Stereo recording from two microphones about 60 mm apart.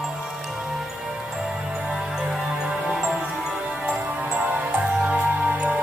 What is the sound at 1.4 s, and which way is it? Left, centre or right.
Music, centre.